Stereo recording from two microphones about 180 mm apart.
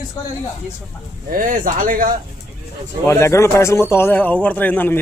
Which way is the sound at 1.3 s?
50° right (ahead or behind).